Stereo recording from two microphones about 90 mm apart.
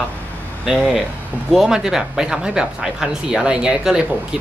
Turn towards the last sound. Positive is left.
turn(degrees=-5)  # may be behind; listen again after turning